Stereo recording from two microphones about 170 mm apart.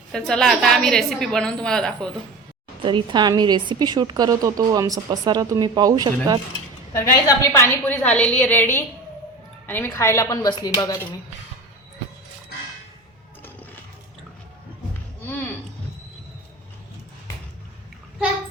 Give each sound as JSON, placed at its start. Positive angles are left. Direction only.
{"t": 0.1, "sound": "a woman's voice", "side_deg": 5}
{"t": 2.8, "sound": "a woman's voice", "side_deg": -30}
{"t": 6.9, "sound": "a woman's voice", "side_deg": 15}